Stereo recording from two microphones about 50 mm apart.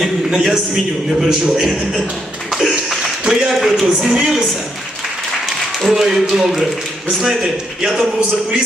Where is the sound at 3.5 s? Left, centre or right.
Centre.